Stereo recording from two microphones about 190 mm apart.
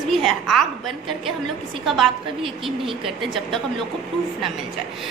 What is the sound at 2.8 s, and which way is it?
Speech, 25° right (ahead or behind).